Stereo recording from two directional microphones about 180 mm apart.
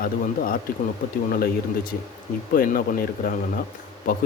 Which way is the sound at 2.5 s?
50° left (ahead or behind).